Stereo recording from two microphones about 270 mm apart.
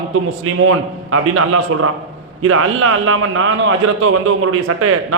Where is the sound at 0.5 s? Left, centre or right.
Right.